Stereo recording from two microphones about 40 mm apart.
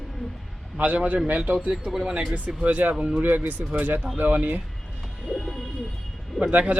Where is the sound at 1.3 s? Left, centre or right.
Right.